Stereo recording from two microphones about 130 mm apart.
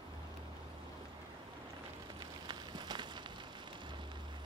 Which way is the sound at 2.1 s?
35° right (ahead or behind).